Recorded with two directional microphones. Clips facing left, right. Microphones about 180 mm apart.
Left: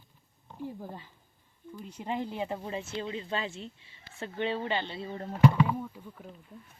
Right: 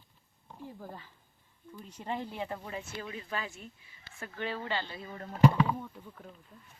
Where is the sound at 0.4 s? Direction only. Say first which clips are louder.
Left 7 dB; 5° left (ahead or behind).